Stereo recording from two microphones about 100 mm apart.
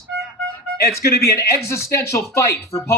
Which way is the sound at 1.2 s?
30° left (ahead or behind).